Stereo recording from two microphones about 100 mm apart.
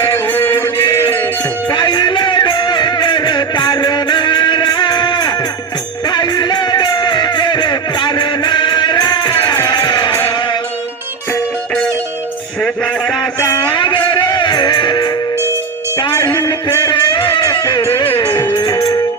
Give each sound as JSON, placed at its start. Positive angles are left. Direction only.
{"t": 0.3, "sound": "music", "side_deg": 20}
{"t": 1.7, "sound": "music", "side_deg": 50}
{"t": 12.6, "sound": "music", "side_deg": 5}
{"t": 13.6, "sound": "music", "side_deg": 50}
{"t": 16.3, "sound": "music", "side_deg": 25}
{"t": 16.9, "sound": "music", "side_deg": 50}